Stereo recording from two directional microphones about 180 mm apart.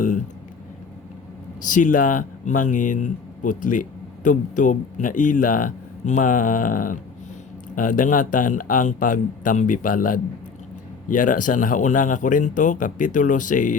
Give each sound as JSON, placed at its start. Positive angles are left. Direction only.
{"t": 1.6, "sound": "speech", "side_deg": 45}